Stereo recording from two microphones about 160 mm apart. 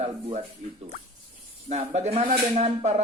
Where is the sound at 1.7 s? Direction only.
45° right (ahead or behind).